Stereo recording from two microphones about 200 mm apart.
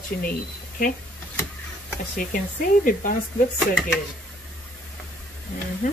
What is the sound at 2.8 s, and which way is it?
Speech, 45° left (ahead or behind).